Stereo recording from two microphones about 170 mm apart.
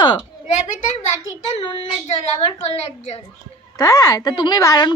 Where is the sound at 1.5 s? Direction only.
35° left (ahead or behind).